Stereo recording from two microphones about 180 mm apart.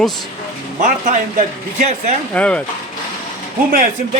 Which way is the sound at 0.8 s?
45° right (ahead or behind).